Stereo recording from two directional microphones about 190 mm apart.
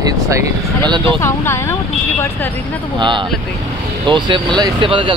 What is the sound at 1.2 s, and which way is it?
Speech, 15° left (ahead or behind).